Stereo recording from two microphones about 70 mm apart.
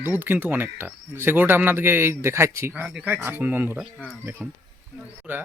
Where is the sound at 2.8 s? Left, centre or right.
Right.